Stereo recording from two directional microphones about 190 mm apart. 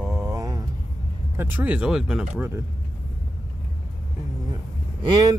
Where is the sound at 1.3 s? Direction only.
10° right (ahead or behind).